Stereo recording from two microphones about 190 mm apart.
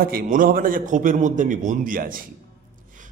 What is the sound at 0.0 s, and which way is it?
A man's voice, 50° right (ahead or behind).